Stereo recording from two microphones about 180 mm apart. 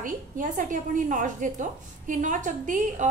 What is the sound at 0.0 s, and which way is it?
A woman's voice, 45° right (ahead or behind).